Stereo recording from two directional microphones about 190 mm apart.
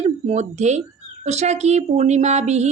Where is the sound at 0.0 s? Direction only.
35° right (ahead or behind).